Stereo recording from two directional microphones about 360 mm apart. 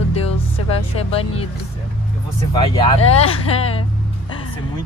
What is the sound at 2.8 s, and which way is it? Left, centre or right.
Speech, centre.